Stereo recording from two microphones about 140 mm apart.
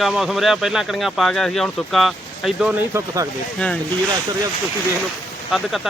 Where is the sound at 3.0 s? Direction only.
25° right (ahead or behind).